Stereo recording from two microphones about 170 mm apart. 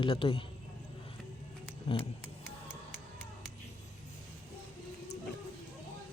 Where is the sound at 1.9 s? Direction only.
35° left (ahead or behind).